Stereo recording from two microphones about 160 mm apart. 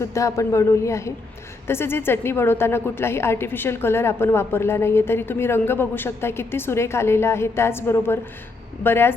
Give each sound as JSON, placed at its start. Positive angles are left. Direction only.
{"t": 0.0, "sound": "a man's voice", "side_deg": 20}